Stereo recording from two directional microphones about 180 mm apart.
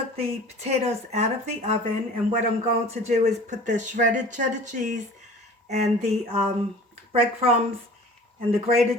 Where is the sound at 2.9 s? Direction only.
40° right (ahead or behind).